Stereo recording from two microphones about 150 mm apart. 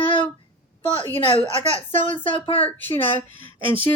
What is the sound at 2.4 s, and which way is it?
Speech, 40° left (ahead or behind).